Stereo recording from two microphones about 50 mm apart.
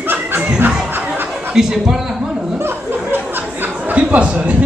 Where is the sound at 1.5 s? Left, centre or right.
Centre.